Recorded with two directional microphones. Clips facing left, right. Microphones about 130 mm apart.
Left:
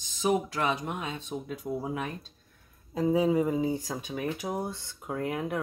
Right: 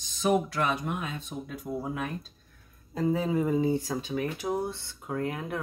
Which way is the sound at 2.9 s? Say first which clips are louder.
Left 2 dB; 10° left (ahead or behind).